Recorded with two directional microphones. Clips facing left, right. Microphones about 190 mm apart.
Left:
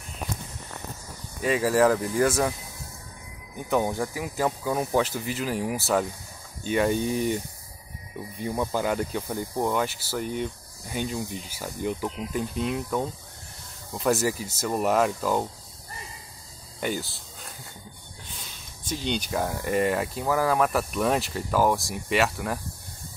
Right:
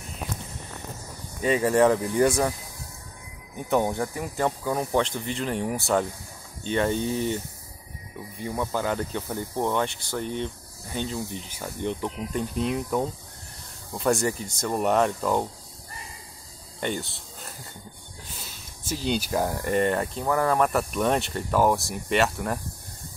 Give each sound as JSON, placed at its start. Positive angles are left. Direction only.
{"t": 1.6, "sound": "speech", "side_deg": 0}
{"t": 2.1, "sound": "speech", "side_deg": -20}
{"t": 3.5, "sound": "speech", "side_deg": 0}
{"t": 8.5, "sound": "speech", "side_deg": 10}
{"t": 16.8, "sound": "speech", "side_deg": 5}